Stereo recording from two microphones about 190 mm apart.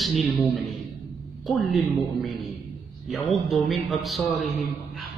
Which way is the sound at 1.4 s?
Centre (ahead or behind).